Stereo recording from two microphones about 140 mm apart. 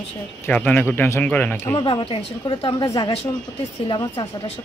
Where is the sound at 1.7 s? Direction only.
35° left (ahead or behind).